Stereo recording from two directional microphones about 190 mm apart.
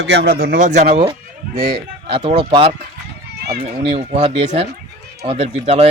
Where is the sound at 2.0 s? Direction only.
30° right (ahead or behind).